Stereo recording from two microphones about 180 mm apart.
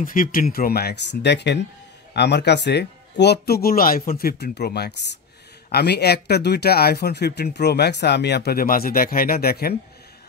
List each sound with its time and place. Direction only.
0.0 s speech: 50° left (ahead or behind)